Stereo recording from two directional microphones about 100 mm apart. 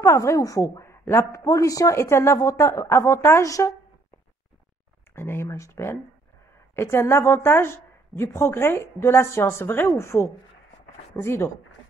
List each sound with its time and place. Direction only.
0.0 s a woman's voice: 30° left (ahead or behind)
5.1 s a woman's voice: 25° left (ahead or behind)